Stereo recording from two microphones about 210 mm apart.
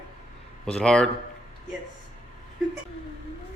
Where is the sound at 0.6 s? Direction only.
5° left (ahead or behind).